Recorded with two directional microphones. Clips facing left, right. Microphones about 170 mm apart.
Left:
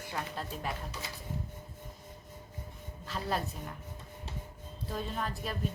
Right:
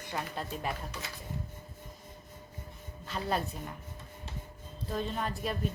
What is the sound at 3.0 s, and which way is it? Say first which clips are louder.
Speech: right 2 dB; centre (ahead or behind).